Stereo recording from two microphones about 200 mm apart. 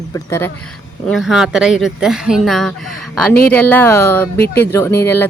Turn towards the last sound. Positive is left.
turn(degrees=15)  # may be behind; listen again after turning